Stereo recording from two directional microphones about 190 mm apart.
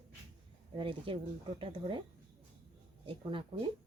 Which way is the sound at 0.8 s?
25° right (ahead or behind).